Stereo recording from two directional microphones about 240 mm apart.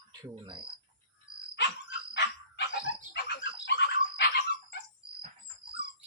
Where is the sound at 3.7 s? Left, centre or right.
Left.